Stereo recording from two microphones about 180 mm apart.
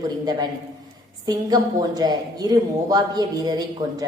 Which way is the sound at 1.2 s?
20° right (ahead or behind).